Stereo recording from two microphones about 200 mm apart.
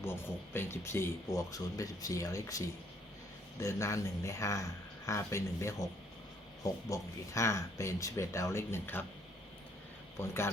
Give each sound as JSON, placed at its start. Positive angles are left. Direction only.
{"t": 0.5, "sound": "speech", "side_deg": 10}
{"t": 6.8, "sound": "speech", "side_deg": 15}
{"t": 10.2, "sound": "speech", "side_deg": 15}